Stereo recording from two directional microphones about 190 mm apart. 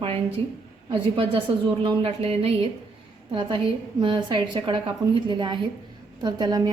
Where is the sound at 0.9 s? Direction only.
25° right (ahead or behind).